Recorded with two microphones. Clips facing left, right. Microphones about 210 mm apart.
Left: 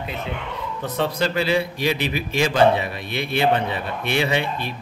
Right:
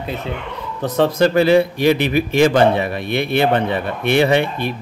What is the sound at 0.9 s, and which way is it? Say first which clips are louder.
A man's voice: right 8 dB; 45° right (ahead or behind).